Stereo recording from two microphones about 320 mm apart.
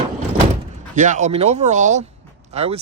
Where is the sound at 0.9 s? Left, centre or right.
Right.